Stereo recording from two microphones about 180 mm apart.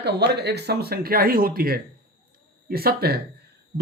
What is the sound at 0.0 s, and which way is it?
Speech, 70° right (ahead or behind).